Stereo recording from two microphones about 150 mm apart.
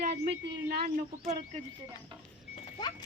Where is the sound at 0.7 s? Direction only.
85° right.